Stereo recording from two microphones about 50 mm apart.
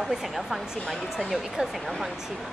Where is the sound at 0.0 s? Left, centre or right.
Centre.